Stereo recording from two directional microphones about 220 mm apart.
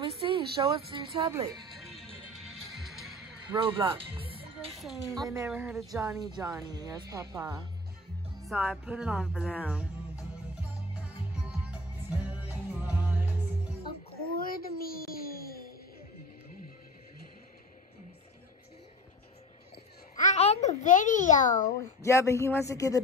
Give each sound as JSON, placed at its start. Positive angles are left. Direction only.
{"t": 0.0, "sound": "a woman's voice", "side_deg": -25}
{"t": 1.5, "sound": "music", "side_deg": 0}
{"t": 3.5, "sound": "speech", "side_deg": -25}
{"t": 4.6, "sound": "speech", "side_deg": 0}
{"t": 5.1, "sound": "speech", "side_deg": -15}
{"t": 5.9, "sound": "speech", "side_deg": -15}
{"t": 8.5, "sound": "music", "side_deg": -5}
{"t": 14.4, "sound": "a sound", "side_deg": 40}
{"t": 19.7, "sound": "a child's voice", "side_deg": 30}
{"t": 21.7, "sound": "speech", "side_deg": 15}